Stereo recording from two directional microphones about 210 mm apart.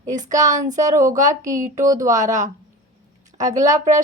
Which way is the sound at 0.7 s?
35° right (ahead or behind).